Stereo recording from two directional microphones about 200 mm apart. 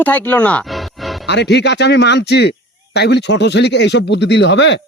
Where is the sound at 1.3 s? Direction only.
60° left (ahead or behind).